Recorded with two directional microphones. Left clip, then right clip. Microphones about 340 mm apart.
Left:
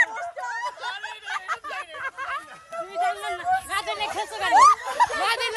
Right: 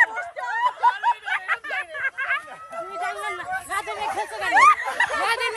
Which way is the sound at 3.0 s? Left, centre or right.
Centre.